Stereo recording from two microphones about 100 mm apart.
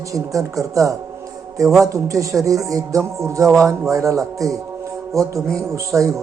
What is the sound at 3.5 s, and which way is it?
Music, centre (ahead or behind).